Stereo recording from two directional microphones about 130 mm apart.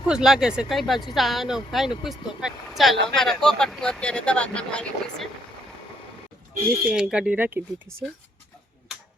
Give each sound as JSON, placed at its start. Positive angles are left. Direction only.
{"t": 0.1, "sound": "speech", "side_deg": -5}
{"t": 6.8, "sound": "speech", "side_deg": -5}